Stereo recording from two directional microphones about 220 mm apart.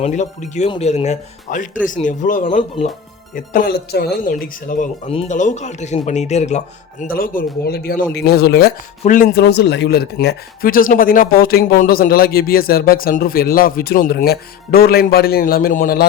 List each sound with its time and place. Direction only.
0.0 s speech: 30° left (ahead or behind)